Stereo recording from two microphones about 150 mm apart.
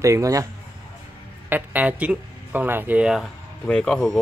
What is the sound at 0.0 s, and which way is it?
Speech, 20° right (ahead or behind).